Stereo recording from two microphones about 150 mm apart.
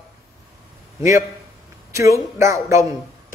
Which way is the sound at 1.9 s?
20° right (ahead or behind).